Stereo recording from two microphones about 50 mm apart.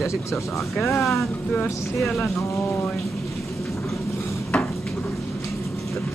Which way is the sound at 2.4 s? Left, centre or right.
Left.